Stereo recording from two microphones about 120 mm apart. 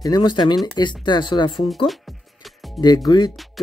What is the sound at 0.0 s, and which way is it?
Speech, 35° left (ahead or behind).